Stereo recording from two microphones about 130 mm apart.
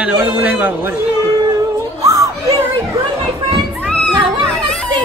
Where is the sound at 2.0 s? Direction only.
25° right (ahead or behind).